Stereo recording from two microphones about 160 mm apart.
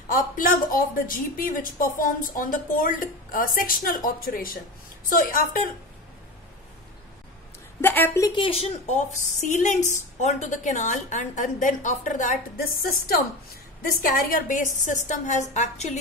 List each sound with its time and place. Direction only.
0.1 s a woman's voice: 60° left (ahead or behind)
7.8 s a woman's voice: 15° left (ahead or behind)
8.3 s a woman's voice: 35° left (ahead or behind)